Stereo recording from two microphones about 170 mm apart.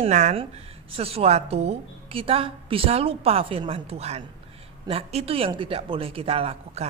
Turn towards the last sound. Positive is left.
turn(degrees=-35)  # may be behind; listen again after turning